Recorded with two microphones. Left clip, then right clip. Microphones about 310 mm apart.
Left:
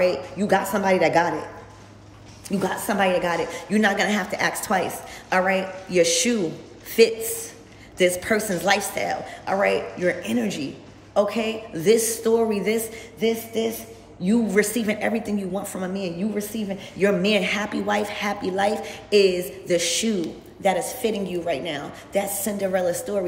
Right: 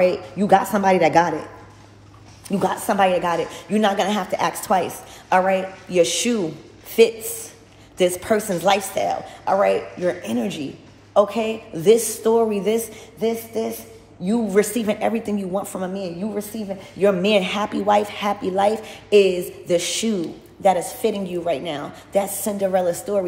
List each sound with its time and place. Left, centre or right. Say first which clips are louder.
0.5 s speech: right 4 dB; centre
2.6 s a man's voice: right 4 dB; centre